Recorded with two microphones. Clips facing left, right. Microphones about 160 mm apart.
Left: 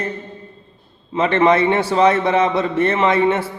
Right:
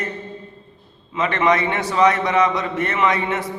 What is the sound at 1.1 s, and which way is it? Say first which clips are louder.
A man's voice: left 4 dB; 30° left (ahead or behind).